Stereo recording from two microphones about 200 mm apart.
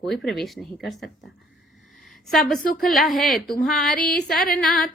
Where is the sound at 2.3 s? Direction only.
Centre (ahead or behind).